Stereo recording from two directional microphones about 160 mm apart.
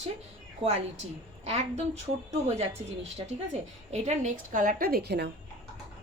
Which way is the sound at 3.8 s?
45° right (ahead or behind).